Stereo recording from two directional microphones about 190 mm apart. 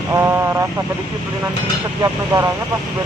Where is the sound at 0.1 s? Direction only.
15° right (ahead or behind).